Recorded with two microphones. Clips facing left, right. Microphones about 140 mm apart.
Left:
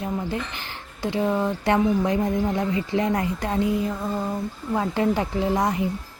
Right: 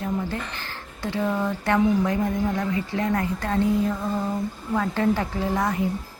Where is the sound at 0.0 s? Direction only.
20° left (ahead or behind).